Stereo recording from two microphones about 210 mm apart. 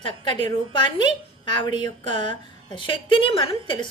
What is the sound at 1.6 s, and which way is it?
A woman's voice, 20° left (ahead or behind).